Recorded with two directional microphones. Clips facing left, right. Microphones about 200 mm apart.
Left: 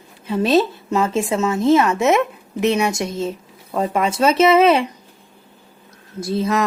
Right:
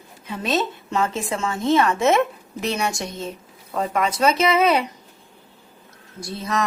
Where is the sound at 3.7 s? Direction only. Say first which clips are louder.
Left 3 dB; 30° left (ahead or behind).